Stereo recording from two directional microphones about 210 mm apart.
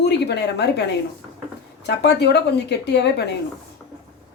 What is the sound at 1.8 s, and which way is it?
Speech, 55° left (ahead or behind).